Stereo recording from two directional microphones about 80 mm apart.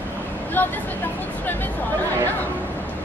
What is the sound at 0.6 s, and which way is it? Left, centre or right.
Speech, left.